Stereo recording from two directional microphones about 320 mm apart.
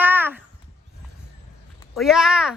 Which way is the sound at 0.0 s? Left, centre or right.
Centre.